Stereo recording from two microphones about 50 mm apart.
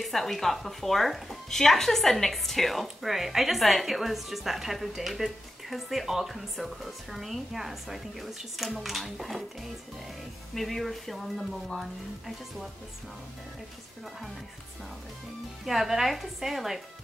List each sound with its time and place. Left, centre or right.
0.0 s speech: centre
15.6 s speech: centre